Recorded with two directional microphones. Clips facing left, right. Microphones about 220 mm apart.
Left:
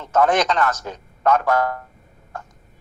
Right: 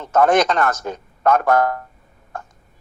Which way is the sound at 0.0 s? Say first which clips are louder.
Right 3 dB; 50° right (ahead or behind).